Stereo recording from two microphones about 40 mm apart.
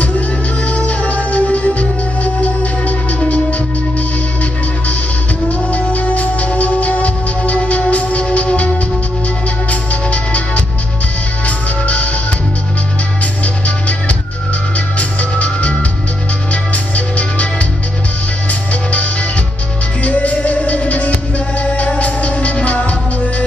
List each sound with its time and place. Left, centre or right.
0.7 s music: left
5.5 s music: left
13.2 s music: left
16.7 s music: left